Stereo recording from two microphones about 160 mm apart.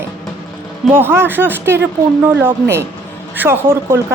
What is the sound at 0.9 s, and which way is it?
Speech, 15° right (ahead or behind).